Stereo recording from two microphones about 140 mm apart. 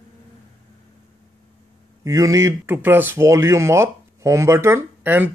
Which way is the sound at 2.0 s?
25° right (ahead or behind).